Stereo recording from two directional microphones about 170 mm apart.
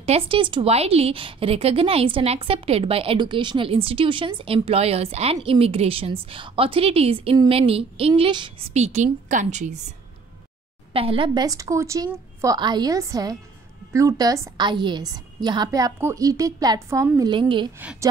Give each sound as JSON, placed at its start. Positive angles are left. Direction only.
{"t": 0.0, "sound": "a woman's voice", "side_deg": -35}
{"t": 10.9, "sound": "a woman's voice", "side_deg": -35}